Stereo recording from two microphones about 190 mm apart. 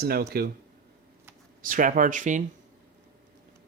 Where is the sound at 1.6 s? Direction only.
45° right (ahead or behind).